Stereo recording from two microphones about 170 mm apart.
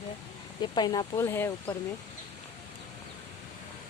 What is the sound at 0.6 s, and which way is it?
Speech, 25° left (ahead or behind).